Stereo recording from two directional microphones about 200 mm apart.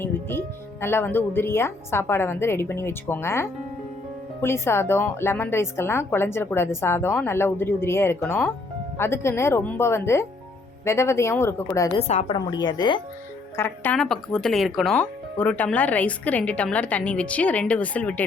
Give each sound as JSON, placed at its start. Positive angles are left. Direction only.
{"t": 0.0, "sound": "speech", "side_deg": 10}
{"t": 11.9, "sound": "a woman's voice", "side_deg": 35}
{"t": 12.5, "sound": "speech", "side_deg": 20}
{"t": 13.6, "sound": "speech", "side_deg": 10}